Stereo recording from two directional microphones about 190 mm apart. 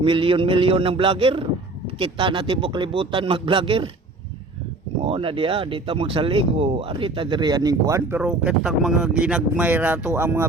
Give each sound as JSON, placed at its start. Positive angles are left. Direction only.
{"t": 0.0, "sound": "speech", "side_deg": -25}
{"t": 5.0, "sound": "speech", "side_deg": -30}
{"t": 8.2, "sound": "speech", "side_deg": -5}